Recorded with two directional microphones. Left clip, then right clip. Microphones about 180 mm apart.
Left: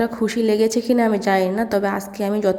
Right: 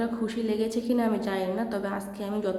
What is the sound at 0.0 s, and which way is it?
A woman's voice, 40° left (ahead or behind).